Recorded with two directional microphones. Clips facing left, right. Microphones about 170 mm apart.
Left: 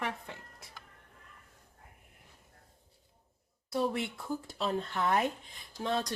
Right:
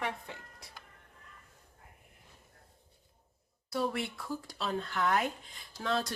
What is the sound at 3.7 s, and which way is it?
Speech, 20° left (ahead or behind).